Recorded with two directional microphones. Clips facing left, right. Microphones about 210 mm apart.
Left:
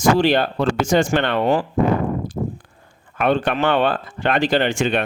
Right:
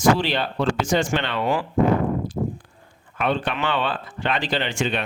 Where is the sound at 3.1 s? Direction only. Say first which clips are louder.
Left 5 dB; 50° left (ahead or behind).